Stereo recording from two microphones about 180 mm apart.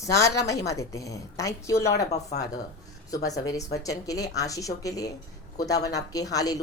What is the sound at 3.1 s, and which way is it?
A woman's voice, 20° left (ahead or behind).